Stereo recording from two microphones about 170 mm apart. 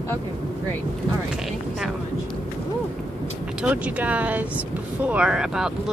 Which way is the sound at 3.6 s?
10° right (ahead or behind).